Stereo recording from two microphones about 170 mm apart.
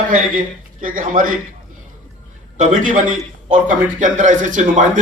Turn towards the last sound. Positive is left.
turn(degrees=-50)  # may be behind; listen again after turning